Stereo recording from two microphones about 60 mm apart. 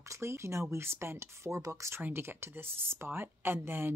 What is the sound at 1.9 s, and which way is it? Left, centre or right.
Speech, right.